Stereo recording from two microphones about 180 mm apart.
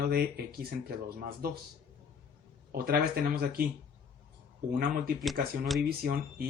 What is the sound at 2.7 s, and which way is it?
Speech, 55° right (ahead or behind).